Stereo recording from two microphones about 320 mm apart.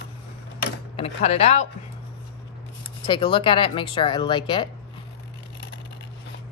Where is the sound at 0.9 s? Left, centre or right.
Centre.